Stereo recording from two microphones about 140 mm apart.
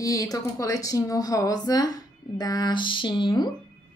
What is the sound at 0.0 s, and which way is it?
A woman's voice, 25° left (ahead or behind).